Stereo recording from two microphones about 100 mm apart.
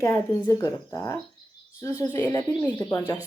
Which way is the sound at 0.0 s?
30° left (ahead or behind).